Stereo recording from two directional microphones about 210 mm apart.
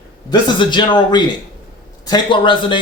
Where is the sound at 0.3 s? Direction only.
20° left (ahead or behind).